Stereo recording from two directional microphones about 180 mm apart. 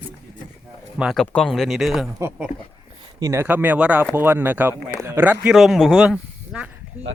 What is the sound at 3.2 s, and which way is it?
Speech, 15° right (ahead or behind).